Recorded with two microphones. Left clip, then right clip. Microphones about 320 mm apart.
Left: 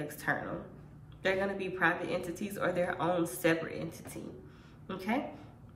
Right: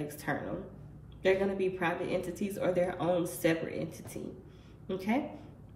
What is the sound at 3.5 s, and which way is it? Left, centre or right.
Speech, centre.